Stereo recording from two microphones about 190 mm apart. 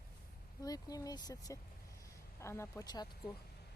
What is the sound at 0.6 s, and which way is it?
Speech, 20° left (ahead or behind).